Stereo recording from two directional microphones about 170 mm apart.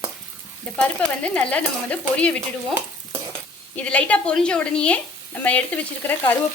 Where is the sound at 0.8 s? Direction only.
10° left (ahead or behind).